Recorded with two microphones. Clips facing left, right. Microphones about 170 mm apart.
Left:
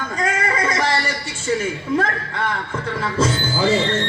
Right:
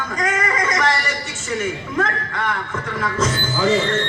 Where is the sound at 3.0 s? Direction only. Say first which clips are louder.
Left 1 dB; 30° left (ahead or behind).